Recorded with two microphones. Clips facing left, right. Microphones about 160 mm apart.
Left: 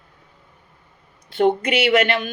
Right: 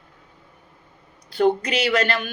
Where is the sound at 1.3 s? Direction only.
25° left (ahead or behind).